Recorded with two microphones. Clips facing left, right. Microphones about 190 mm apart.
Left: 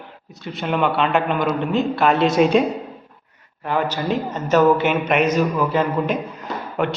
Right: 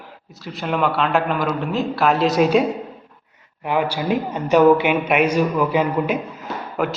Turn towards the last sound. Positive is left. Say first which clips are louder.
# left 1 dB
turn(degrees=0)  # may be behind; listen again after turning